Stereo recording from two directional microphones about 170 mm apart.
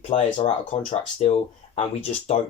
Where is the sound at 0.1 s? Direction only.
30° left (ahead or behind).